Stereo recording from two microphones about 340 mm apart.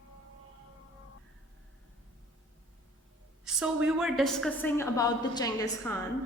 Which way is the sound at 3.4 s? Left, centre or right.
Centre.